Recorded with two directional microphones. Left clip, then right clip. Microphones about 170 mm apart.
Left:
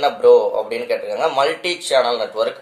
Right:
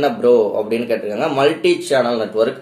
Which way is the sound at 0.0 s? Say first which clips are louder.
Left 1 dB; 10° left (ahead or behind).